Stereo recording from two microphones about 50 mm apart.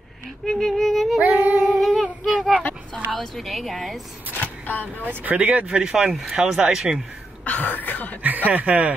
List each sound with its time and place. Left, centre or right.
0.5 s music: centre
1.2 s female singing: right
1.8 s a sound: centre
3.1 s speech: centre
4.4 s a sound: left
5.0 s speech: right
5.7 s speech: centre
7.4 s cough: left
8.2 s speech: right